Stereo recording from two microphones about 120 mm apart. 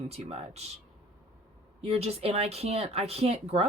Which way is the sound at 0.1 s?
60° right (ahead or behind).